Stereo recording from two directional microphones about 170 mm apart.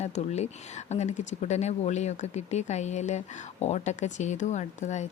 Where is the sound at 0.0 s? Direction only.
40° left (ahead or behind).